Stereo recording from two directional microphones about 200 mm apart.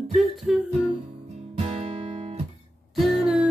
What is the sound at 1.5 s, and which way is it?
Guitar, 30° right (ahead or behind).